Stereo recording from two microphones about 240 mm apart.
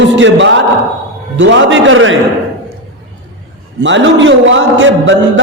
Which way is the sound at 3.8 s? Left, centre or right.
Right.